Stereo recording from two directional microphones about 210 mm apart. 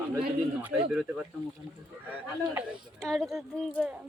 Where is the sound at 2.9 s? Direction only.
Centre (ahead or behind).